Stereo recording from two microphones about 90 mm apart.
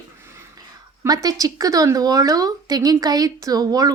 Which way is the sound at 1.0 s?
45° right (ahead or behind).